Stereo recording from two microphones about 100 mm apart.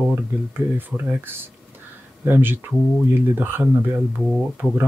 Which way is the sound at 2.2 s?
20° right (ahead or behind).